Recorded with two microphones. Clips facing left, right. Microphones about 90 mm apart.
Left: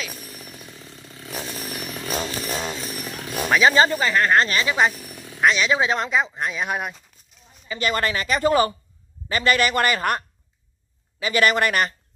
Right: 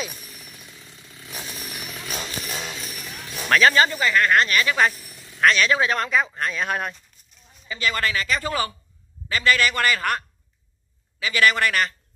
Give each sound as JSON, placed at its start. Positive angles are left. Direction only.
{"t": 0.1, "sound": "chainsaw", "side_deg": 0}
{"t": 0.4, "sound": "chainsaw", "side_deg": 40}
{"t": 3.4, "sound": "speech", "side_deg": 15}
{"t": 3.7, "sound": "speech", "side_deg": 30}
{"t": 4.9, "sound": "a sound", "side_deg": 65}
{"t": 5.4, "sound": "speech", "side_deg": 15}
{"t": 7.7, "sound": "speech", "side_deg": 30}